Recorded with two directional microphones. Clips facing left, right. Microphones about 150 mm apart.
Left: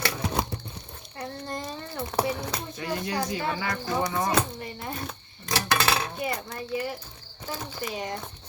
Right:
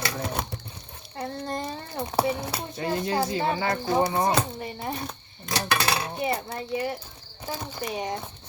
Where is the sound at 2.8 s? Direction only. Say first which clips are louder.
Right 4 dB; 30° right (ahead or behind).